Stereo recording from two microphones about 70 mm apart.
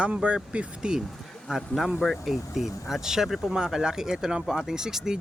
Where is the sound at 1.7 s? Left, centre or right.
Centre.